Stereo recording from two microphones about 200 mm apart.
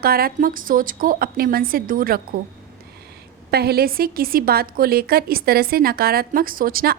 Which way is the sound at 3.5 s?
50° right (ahead or behind).